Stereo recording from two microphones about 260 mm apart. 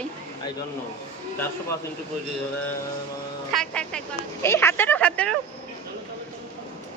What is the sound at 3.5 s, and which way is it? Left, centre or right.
Speech, centre.